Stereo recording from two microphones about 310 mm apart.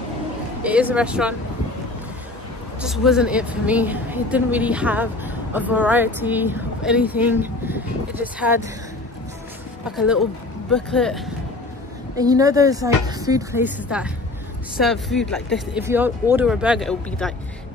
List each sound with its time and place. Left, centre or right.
0.7 s speech: centre
2.8 s a woman's voice: centre
9.8 s speech: centre
12.2 s speech: centre